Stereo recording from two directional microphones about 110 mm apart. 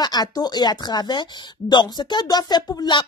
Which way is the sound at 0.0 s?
40° left (ahead or behind).